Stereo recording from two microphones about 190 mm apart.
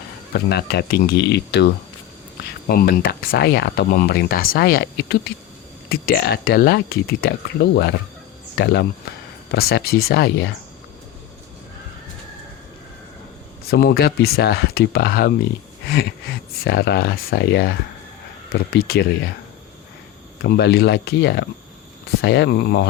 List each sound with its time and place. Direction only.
0.3 s speech: 60° left (ahead or behind)
13.7 s speech: 55° left (ahead or behind)
16.3 s speech: 55° left (ahead or behind)
18.7 s speech: 60° left (ahead or behind)
20.4 s speech: 60° left (ahead or behind)